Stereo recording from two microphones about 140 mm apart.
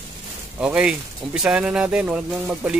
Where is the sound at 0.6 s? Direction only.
5° right (ahead or behind).